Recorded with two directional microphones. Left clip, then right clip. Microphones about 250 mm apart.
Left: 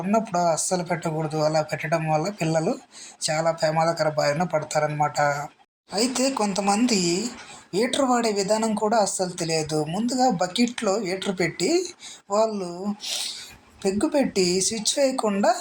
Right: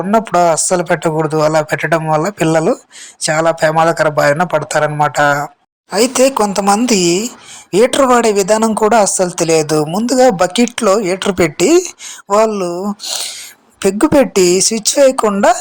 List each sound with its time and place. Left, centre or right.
0.1 s speech: right